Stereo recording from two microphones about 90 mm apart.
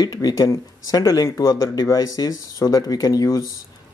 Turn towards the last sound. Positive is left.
turn(degrees=40)  # may be behind; listen again after turning